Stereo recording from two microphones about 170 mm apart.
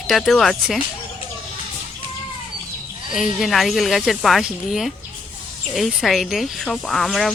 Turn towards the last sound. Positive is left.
turn(degrees=0)  # may be behind; listen again after turning